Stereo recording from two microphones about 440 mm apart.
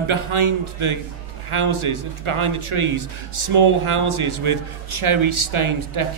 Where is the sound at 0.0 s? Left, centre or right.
Right.